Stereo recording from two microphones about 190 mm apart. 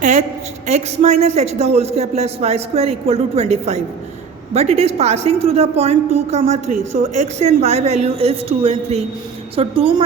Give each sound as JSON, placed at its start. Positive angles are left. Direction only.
{"t": 0.0, "sound": "a woman's voice", "side_deg": -40}